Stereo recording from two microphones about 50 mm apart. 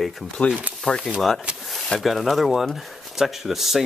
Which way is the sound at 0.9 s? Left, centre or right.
Centre.